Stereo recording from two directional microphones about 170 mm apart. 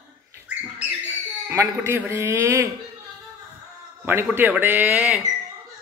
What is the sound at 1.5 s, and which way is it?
A man's voice, 15° right (ahead or behind).